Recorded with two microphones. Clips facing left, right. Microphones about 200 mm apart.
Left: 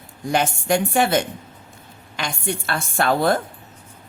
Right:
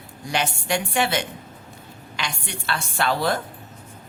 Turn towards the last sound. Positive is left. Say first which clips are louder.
# left 4 dB
turn(degrees=50)  # may be behind; listen again after turning